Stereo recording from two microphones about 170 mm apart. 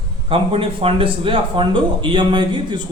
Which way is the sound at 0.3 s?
35° right (ahead or behind).